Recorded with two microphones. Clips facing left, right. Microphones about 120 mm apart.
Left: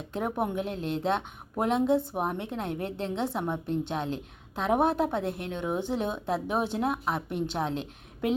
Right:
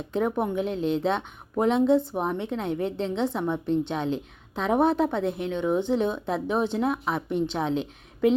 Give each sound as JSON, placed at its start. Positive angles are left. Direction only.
{"t": 0.1, "sound": "a woman's voice", "side_deg": 5}